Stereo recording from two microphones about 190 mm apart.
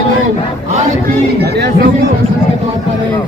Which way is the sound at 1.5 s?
60° right (ahead or behind).